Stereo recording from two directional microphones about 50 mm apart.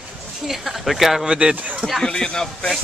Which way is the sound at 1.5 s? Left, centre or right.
Right.